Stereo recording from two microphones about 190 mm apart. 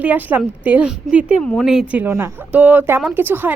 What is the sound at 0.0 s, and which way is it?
A woman's voice, 10° right (ahead or behind).